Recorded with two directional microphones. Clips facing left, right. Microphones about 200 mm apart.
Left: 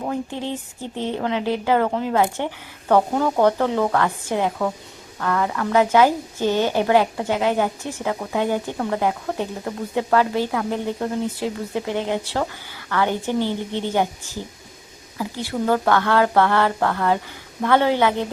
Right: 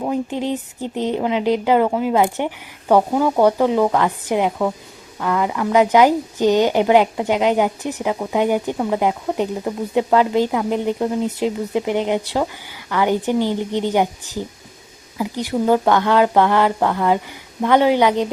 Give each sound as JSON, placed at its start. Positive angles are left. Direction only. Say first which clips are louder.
{"t": 0.0, "sound": "speech", "louder": "right 4 dB", "side_deg": -15}
{"t": 15.2, "sound": "speech", "louder": "right 4 dB", "side_deg": -15}